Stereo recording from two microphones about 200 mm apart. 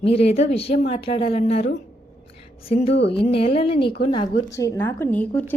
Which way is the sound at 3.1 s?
30° left (ahead or behind).